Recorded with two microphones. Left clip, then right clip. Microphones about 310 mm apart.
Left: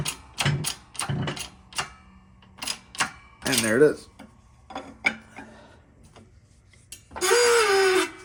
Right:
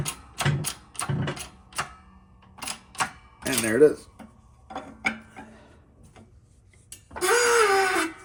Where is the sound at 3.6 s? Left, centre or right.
Left.